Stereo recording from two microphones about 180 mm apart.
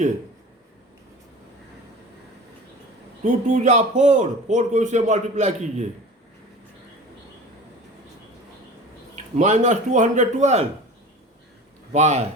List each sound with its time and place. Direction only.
3.2 s a man's voice: 40° right (ahead or behind)
9.3 s a man's voice: 40° right (ahead or behind)
11.9 s a man's voice: 40° right (ahead or behind)